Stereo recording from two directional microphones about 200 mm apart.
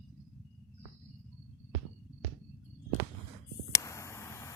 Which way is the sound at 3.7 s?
15° left (ahead or behind).